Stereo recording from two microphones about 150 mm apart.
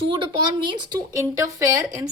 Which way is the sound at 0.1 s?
35° right (ahead or behind).